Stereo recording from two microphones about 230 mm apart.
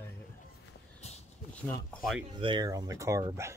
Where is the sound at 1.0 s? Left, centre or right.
Left.